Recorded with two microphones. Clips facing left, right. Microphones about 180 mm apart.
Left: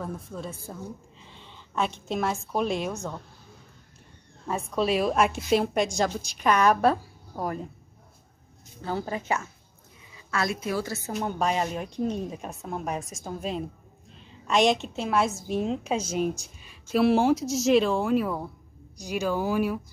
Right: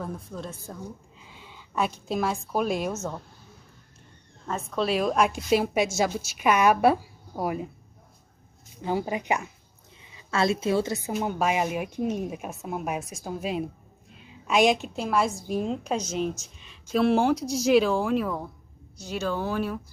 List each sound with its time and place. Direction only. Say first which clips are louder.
0.0 s a woman's voice: even; 5° left (ahead or behind)
1.2 s a sound: even; 5° right (ahead or behind)
2.0 s a woman's voice: right 1 dB; centre (ahead or behind)
4.5 s a woman's voice: left 1 dB; 10° left (ahead or behind); by 7.7 s 10° right (ahead or behind)
8.8 s speech: right 3 dB; 15° right (ahead or behind)
10.3 s a woman's voice: right 5 dB; 25° right (ahead or behind)
11.1 s a woman's voice: right 1 dB; 5° right (ahead or behind)